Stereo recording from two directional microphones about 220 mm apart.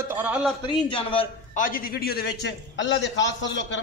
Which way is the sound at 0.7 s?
20° left (ahead or behind).